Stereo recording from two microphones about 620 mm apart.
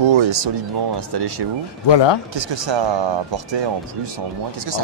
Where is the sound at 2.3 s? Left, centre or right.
Right.